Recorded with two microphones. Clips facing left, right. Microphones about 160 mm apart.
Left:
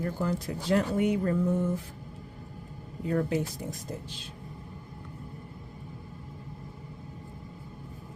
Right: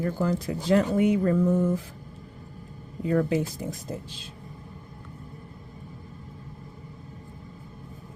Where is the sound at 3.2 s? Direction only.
90° right.